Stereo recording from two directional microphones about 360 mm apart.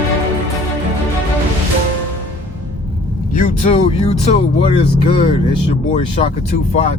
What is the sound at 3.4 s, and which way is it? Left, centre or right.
Vehicle, centre.